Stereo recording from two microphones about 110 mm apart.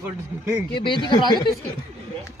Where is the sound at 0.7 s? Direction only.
45° left (ahead or behind).